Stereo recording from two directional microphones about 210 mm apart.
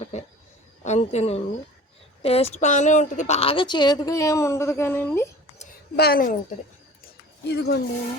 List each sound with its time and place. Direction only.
0.9 s a woman's voice: 30° left (ahead or behind); by 5.3 s 10° left (ahead or behind)
6.0 s a woman's voice: 45° left (ahead or behind)
7.4 s a woman's voice: 50° left (ahead or behind)